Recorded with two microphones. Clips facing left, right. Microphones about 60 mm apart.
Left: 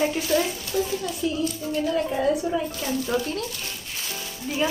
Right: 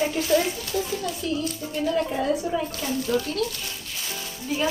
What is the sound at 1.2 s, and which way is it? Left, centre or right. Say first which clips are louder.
Speech: left 2 dB; centre.